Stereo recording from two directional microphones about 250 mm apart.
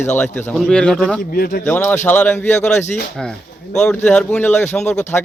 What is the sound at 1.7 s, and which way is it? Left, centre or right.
A man's voice, centre.